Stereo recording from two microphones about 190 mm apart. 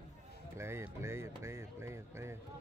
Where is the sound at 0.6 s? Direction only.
15° right (ahead or behind).